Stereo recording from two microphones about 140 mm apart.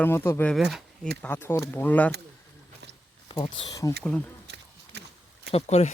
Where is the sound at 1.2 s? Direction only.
15° left (ahead or behind).